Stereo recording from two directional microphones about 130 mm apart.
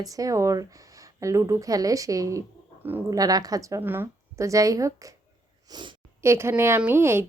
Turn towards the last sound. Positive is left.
turn(degrees=-20)  # may be behind; listen again after turning